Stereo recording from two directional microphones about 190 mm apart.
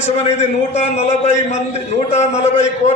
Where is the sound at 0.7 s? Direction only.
35° left (ahead or behind).